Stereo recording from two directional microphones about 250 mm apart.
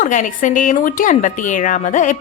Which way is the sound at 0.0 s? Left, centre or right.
Left.